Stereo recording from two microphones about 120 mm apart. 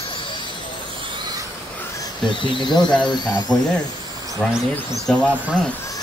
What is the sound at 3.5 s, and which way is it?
Speech, 5° left (ahead or behind).